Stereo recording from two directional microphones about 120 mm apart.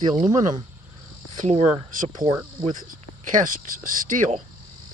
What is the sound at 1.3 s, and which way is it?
Speech, 75° right (ahead or behind).